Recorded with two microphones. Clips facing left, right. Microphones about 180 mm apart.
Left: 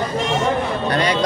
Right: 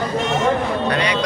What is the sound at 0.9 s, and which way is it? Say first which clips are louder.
Speech: left 4 dB; 45° left (ahead or behind).